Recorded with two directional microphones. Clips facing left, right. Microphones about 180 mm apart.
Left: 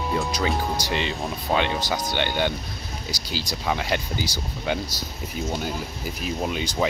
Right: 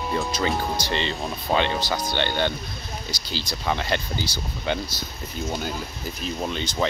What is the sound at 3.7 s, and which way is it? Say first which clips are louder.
Speech: even; 5° left (ahead or behind).